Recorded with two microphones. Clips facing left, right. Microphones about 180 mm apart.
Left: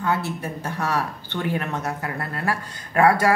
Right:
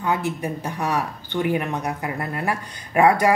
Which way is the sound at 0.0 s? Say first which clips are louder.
Right 1 dB; 15° right (ahead or behind).